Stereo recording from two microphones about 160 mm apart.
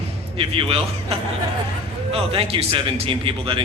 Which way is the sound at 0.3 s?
35° right (ahead or behind).